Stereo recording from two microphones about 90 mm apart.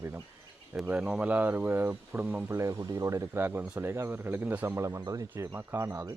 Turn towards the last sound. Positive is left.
turn(degrees=-25)  # may be behind; listen again after turning